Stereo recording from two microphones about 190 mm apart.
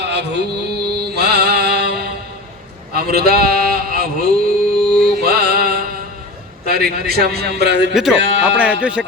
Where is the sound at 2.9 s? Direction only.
55° right (ahead or behind).